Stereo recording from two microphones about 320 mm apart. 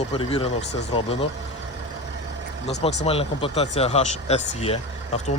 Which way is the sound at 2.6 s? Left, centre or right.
Centre.